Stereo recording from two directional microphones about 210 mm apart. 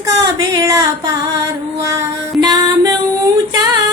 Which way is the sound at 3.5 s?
20° right (ahead or behind).